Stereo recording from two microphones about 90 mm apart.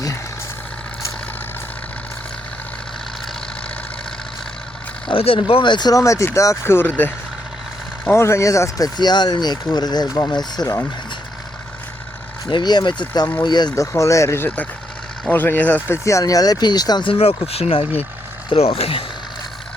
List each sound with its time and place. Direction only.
5.0 s speech: 90° left
5.5 s speech: 75° left (ahead or behind); by 5.9 s 60° left (ahead or behind)
5.9 s speech: 35° left (ahead or behind)
8.0 s speech: 30° left (ahead or behind)
9.0 s speech: 55° left (ahead or behind)
12.5 s speech: 55° left (ahead or behind)
13.7 s speech: 35° left (ahead or behind); by 16.0 s 20° left (ahead or behind)
16.0 s speech: 40° left (ahead or behind)
17.0 s speech: 85° left